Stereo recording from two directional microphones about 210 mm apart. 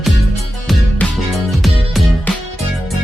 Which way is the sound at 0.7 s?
5° left (ahead or behind).